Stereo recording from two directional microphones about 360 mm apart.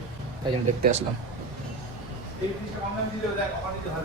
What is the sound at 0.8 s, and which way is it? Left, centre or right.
Speech, centre.